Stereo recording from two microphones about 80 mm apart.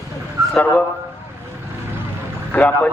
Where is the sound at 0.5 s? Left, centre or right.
Left.